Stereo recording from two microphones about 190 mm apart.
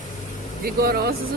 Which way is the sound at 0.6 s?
55° right (ahead or behind).